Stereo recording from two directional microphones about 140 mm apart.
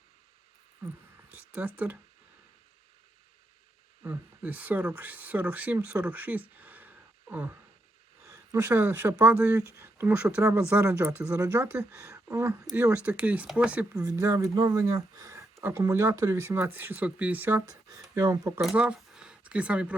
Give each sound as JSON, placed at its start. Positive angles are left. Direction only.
{"t": 1.4, "sound": "speech", "side_deg": -10}
{"t": 4.0, "sound": "speech", "side_deg": -10}
{"t": 6.6, "sound": "a sound", "side_deg": -10}
{"t": 8.3, "sound": "speech", "side_deg": -15}
{"t": 14.0, "sound": "speech", "side_deg": -25}
{"t": 17.7, "sound": "speech", "side_deg": -25}
{"t": 18.6, "sound": "speech", "side_deg": -5}